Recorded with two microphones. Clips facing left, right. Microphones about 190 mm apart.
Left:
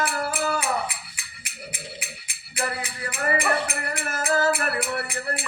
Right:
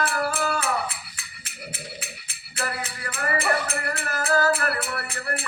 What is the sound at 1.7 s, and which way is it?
Music, 15° left (ahead or behind).